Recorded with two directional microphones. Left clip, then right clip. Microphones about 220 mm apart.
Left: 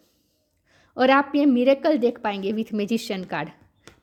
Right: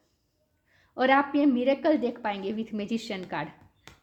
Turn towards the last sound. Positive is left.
turn(degrees=45)  # may be behind; listen again after turning